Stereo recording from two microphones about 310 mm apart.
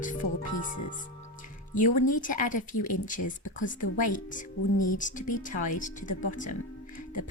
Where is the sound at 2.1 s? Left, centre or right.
Left.